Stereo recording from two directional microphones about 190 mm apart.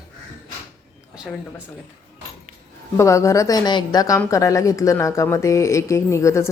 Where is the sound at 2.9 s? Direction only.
15° left (ahead or behind).